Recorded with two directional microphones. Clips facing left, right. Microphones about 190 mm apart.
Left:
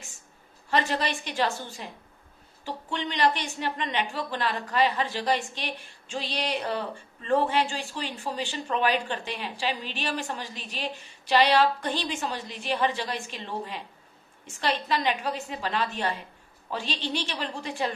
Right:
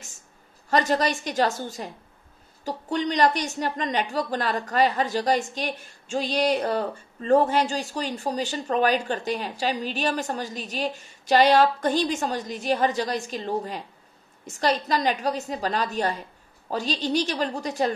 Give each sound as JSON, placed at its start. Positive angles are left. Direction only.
{"t": 0.7, "sound": "a woman's voice", "side_deg": -45}